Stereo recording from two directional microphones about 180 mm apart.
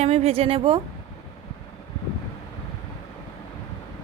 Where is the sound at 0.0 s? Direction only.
35° right (ahead or behind).